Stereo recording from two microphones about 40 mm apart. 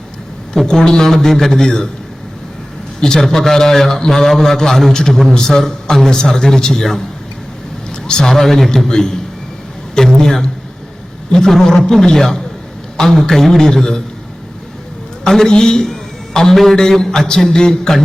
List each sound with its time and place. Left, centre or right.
0.5 s a man's voice: centre
3.0 s a man's voice: centre
8.0 s a man's voice: centre
15.3 s a man's voice: centre